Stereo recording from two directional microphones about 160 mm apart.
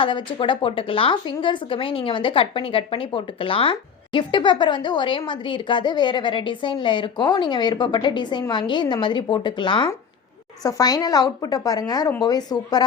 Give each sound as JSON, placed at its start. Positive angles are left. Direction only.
{"t": 0.0, "sound": "a woman's voice", "side_deg": 30}